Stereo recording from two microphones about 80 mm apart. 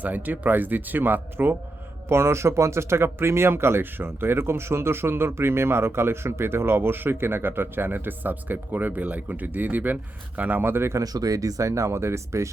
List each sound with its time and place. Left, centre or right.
0.0 s speech: right
11.0 s speech: right